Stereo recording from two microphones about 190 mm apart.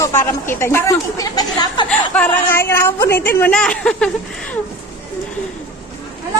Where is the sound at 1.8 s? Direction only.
5° left (ahead or behind).